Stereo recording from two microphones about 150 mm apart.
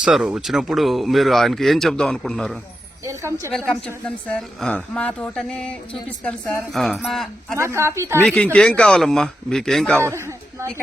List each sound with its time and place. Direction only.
0.0 s a woman's voice: 5° right (ahead or behind)
3.0 s speech: 20° right (ahead or behind)
3.7 s a woman's voice: 5° left (ahead or behind)
7.5 s speech: 20° right (ahead or behind)
8.2 s a woman's voice: 5° left (ahead or behind)
10.0 s speech: 15° right (ahead or behind)